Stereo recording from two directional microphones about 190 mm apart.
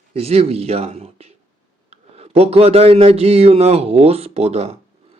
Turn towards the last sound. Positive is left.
turn(degrees=-35)  # may be behind; listen again after turning